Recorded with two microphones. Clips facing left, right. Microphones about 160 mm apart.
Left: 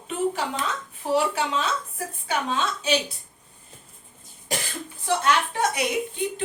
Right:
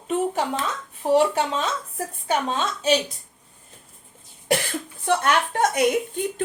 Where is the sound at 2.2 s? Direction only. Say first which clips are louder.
Right 2 dB; 45° right (ahead or behind).